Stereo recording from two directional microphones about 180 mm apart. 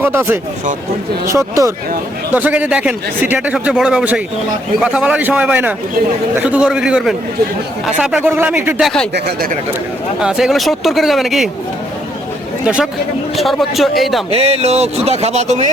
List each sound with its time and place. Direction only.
0.0 s a man's voice: 10° right (ahead or behind)
9.1 s speech: 65° right (ahead or behind)
10.2 s speech: 5° right (ahead or behind)
12.6 s speech: 5° right (ahead or behind)
14.3 s speech: 35° right (ahead or behind)